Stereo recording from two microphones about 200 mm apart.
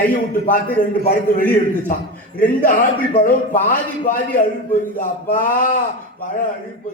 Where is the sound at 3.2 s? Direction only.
45° left (ahead or behind).